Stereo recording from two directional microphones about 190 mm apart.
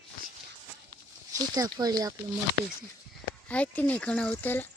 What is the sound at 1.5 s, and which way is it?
Speech, 20° right (ahead or behind).